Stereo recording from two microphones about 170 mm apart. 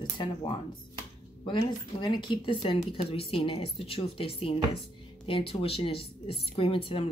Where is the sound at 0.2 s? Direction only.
30° left (ahead or behind).